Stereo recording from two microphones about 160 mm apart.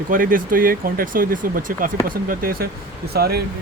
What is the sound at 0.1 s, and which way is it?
Speech, 60° right (ahead or behind).